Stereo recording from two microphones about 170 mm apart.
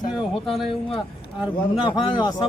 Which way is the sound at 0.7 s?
30° left (ahead or behind).